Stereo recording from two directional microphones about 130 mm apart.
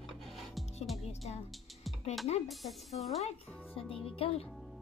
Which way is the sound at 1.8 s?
Centre (ahead or behind).